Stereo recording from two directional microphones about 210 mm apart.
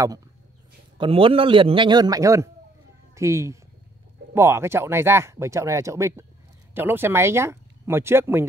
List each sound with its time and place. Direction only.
0.9 s a man's voice: 25° right (ahead or behind)